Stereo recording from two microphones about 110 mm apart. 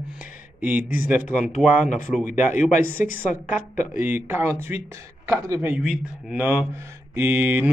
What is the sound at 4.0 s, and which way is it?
Speech, 20° right (ahead or behind).